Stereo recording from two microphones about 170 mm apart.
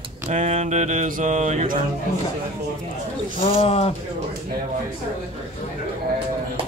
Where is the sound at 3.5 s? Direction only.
35° left (ahead or behind).